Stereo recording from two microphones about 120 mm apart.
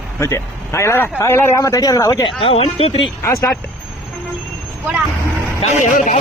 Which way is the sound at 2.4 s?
55° left (ahead or behind).